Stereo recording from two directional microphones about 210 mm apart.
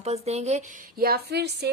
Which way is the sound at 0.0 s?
30° right (ahead or behind).